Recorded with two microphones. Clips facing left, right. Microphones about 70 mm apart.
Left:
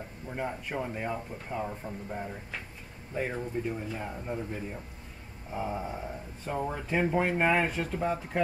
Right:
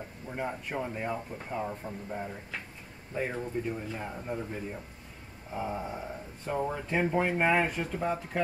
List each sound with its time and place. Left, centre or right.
0.3 s speech: centre
5.5 s speech: centre